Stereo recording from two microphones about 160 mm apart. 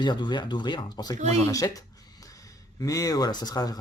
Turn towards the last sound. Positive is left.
turn(degrees=25)  # may be behind; listen again after turning